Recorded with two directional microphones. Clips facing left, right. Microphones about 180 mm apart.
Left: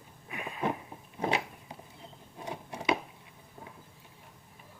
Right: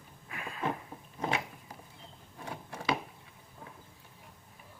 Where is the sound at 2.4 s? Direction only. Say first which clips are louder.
Left 2 dB; 20° left (ahead or behind).